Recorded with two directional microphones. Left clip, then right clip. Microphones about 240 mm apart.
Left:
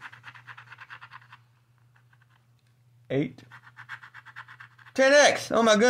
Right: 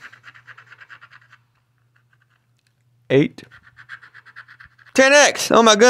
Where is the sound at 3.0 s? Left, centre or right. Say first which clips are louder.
Right 12 dB; right.